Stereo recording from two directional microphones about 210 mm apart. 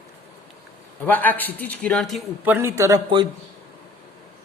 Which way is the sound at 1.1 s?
10° left (ahead or behind).